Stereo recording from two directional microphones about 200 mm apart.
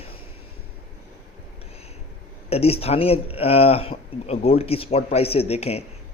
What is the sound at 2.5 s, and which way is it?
Speech, 30° left (ahead or behind).